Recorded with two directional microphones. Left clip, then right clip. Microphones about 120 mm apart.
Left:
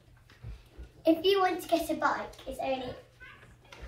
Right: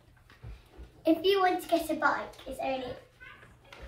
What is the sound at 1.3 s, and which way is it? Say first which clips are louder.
Speech: right 1 dB; 5° left (ahead or behind).